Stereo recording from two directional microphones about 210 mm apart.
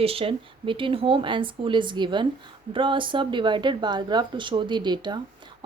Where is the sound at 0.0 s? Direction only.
25° right (ahead or behind).